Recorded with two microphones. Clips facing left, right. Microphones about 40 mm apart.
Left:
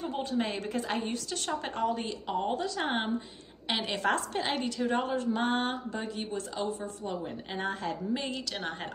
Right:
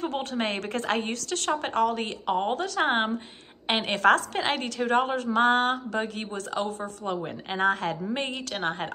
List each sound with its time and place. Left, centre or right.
0.0 s a woman's voice: right
2.5 s a woman's voice: right
4.1 s a woman's voice: right
8.5 s a woman's voice: right